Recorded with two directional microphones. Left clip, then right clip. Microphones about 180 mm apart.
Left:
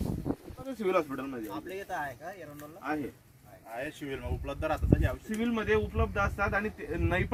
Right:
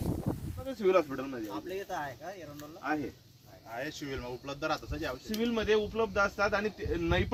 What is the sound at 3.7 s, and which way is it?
Speech, 20° left (ahead or behind).